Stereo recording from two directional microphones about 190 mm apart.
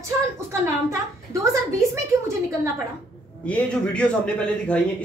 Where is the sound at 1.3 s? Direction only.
15° right (ahead or behind).